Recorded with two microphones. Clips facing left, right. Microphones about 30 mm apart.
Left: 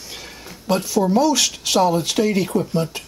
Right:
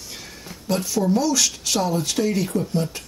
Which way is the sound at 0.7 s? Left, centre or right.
Centre.